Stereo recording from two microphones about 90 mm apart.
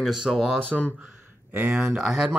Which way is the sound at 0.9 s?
20° right (ahead or behind).